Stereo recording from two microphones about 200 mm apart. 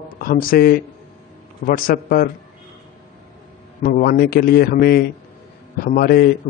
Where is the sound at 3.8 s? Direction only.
45° left (ahead or behind).